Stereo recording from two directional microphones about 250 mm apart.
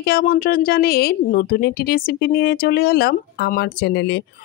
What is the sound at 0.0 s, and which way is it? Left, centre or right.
Speech, left.